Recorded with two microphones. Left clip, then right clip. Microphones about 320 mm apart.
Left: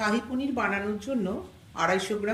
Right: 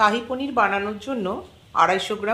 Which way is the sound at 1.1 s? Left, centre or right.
Right.